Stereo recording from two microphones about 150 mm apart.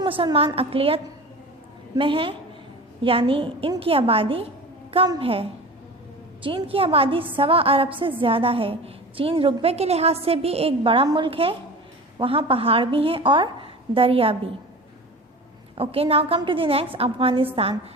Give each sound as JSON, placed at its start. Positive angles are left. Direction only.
{"t": 0.0, "sound": "a woman's voice", "side_deg": -35}
{"t": 15.8, "sound": "a woman's voice", "side_deg": -40}